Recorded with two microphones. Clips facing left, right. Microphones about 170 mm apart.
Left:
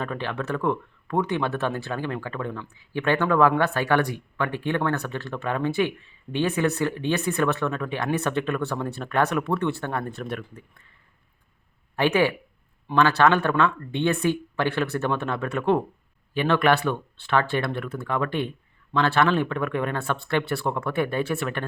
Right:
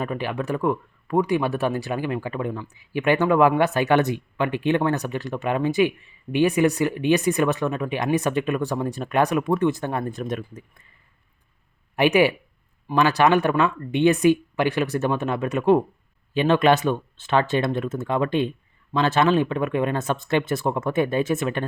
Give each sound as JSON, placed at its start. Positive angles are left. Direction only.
{"t": 0.0, "sound": "speech", "side_deg": -10}
{"t": 11.9, "sound": "speech", "side_deg": -15}